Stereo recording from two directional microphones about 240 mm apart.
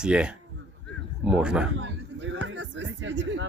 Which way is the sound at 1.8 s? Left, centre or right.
Right.